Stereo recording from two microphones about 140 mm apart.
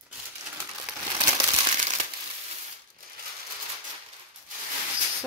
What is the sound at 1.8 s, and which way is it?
Crumpling, 60° right (ahead or behind).